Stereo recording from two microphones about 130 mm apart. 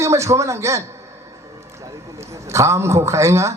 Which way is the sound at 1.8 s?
25° right (ahead or behind).